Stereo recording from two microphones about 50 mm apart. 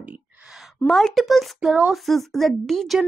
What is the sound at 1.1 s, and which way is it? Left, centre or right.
Speech, centre.